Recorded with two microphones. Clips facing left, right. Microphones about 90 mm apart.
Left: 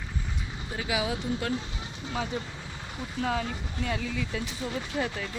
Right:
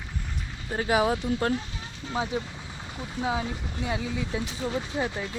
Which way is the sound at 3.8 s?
20° right (ahead or behind).